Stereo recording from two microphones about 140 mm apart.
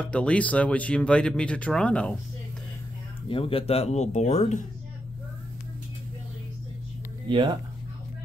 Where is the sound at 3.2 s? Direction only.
40° left (ahead or behind); by 4.6 s 55° left (ahead or behind).